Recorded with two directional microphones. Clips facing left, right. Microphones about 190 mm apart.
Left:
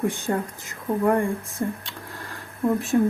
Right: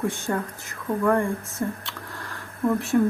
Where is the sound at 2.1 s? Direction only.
15° left (ahead or behind).